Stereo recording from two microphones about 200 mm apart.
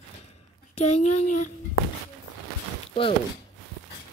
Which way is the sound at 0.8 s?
30° left (ahead or behind).